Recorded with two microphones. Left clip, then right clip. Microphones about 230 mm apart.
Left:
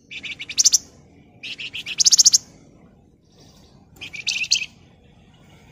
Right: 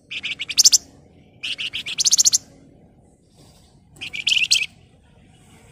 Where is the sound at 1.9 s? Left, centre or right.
Centre.